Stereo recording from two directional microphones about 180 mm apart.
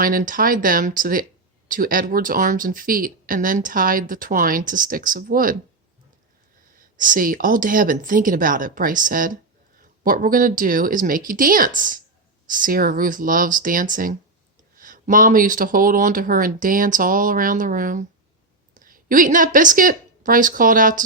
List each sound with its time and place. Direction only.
0.0 s speech: 50° right (ahead or behind)
6.7 s a woman's voice: 50° right (ahead or behind)